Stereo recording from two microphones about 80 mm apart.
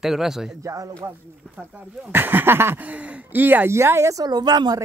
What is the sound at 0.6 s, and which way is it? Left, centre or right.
Speech, right.